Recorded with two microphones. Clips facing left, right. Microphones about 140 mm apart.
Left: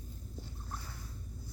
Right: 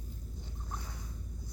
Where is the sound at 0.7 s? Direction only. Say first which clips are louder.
Right 2 dB; 15° right (ahead or behind).